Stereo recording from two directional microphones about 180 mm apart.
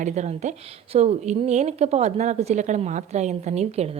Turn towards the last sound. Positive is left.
turn(degrees=-35)  # may be behind; listen again after turning